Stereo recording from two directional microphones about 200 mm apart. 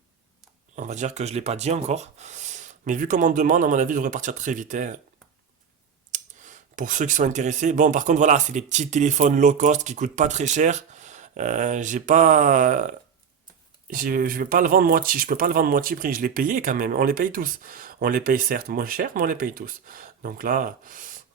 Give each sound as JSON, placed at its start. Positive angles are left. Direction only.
{"t": 0.8, "sound": "speech", "side_deg": -35}
{"t": 6.1, "sound": "speech", "side_deg": -40}